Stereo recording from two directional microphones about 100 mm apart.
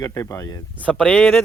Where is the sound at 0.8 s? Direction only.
15° left (ahead or behind).